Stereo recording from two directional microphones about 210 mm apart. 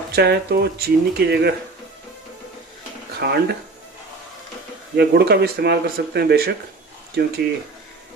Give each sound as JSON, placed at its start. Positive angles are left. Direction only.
{"t": 0.1, "sound": "speech", "side_deg": -50}
{"t": 3.2, "sound": "speech", "side_deg": -50}
{"t": 4.9, "sound": "speech", "side_deg": -50}